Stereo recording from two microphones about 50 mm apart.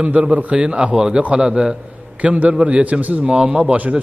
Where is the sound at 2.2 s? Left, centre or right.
Right.